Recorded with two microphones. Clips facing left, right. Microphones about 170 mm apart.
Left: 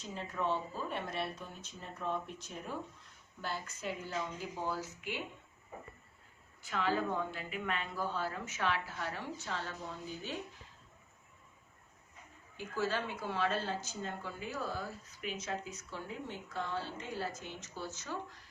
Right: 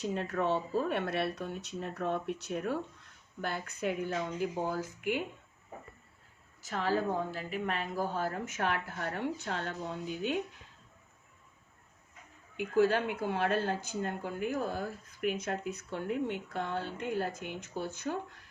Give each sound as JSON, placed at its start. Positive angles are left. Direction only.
{"t": 0.0, "sound": "speech", "side_deg": -65}
{"t": 3.4, "sound": "speech", "side_deg": -60}
{"t": 6.6, "sound": "a woman's voice", "side_deg": -40}
{"t": 12.5, "sound": "speech", "side_deg": -55}